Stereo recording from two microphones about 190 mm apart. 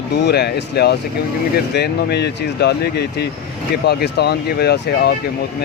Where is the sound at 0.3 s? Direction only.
60° left (ahead or behind).